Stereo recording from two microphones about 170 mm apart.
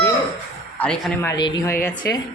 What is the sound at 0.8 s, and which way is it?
Speech, 10° left (ahead or behind).